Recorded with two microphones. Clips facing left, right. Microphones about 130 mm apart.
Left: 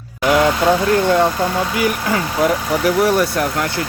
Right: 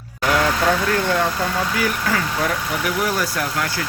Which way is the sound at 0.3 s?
20° left (ahead or behind).